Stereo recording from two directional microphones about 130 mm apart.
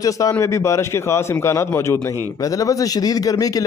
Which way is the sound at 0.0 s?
25° left (ahead or behind).